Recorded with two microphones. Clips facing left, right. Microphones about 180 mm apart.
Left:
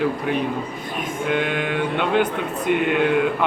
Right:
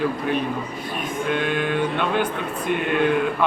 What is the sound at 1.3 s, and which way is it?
Speech, 15° left (ahead or behind).